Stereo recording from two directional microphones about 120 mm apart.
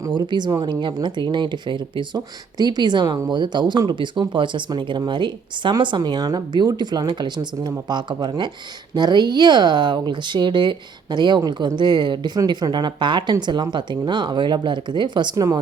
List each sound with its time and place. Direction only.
0.1 s speech: 40° right (ahead or behind)